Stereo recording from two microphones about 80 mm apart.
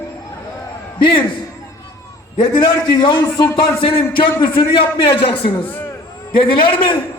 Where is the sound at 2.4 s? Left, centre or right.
Left.